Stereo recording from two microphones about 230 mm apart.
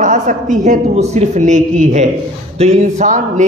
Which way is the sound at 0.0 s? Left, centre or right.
Right.